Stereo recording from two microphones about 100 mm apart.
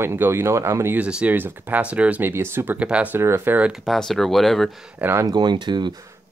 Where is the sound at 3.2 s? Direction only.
25° right (ahead or behind).